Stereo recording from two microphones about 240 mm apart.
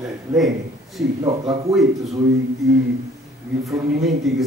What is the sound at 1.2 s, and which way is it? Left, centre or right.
Speech, centre.